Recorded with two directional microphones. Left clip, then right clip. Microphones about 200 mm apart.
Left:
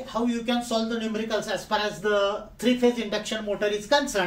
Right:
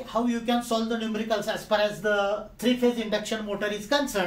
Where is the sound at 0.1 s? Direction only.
20° right (ahead or behind).